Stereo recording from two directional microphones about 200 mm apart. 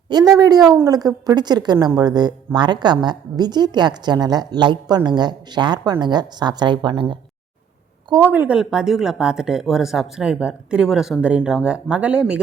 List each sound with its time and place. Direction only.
0.1 s a woman's voice: 20° right (ahead or behind)
8.1 s speech: 10° right (ahead or behind)